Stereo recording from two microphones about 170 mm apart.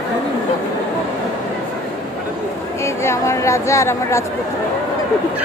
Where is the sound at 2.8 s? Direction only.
15° left (ahead or behind).